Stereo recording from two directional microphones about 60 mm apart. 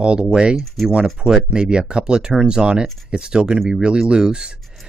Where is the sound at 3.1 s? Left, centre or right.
Centre.